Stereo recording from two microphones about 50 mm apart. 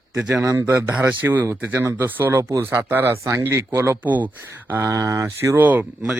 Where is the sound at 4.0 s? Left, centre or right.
Right.